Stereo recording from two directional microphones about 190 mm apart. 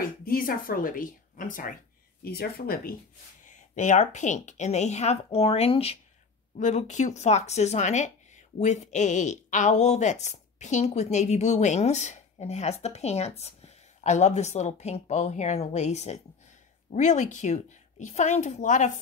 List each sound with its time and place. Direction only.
0.2 s speech: 50° left (ahead or behind)
2.2 s speech: 55° left (ahead or behind)
3.4 s speech: 40° left (ahead or behind)